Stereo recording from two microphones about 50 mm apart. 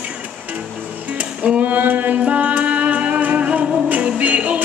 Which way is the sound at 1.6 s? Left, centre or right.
Right.